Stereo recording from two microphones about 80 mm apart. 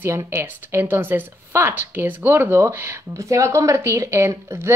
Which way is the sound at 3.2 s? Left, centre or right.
Right.